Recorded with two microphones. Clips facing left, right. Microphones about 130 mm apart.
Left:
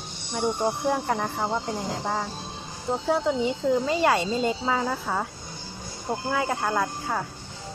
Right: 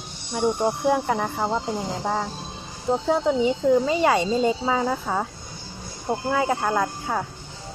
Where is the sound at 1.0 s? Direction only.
5° right (ahead or behind).